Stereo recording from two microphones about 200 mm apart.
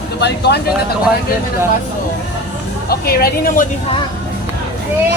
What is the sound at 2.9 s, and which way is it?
Speech, 50° left (ahead or behind).